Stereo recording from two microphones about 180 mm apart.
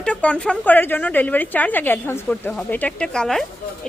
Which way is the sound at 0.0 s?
5° left (ahead or behind).